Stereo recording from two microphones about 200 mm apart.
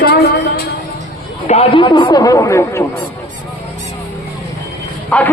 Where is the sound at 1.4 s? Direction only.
30° left (ahead or behind); by 2.8 s 15° left (ahead or behind).